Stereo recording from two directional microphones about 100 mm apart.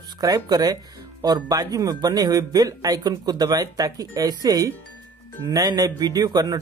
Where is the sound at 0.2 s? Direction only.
40° right (ahead or behind).